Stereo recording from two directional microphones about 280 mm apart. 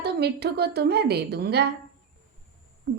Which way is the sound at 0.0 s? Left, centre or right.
Right.